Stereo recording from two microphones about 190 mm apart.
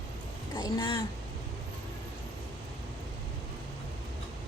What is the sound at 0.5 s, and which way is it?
Speech, 20° left (ahead or behind).